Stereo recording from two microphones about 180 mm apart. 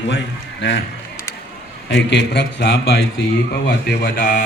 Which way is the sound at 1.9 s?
80° left.